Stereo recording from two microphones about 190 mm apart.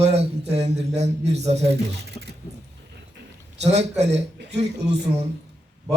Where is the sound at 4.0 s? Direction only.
35° right (ahead or behind).